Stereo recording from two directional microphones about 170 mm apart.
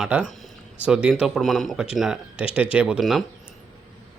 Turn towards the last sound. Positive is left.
turn(degrees=0)  # may be behind; listen again after turning